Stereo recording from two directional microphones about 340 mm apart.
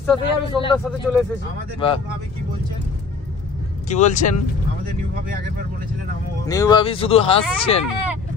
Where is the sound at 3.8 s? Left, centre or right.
Left.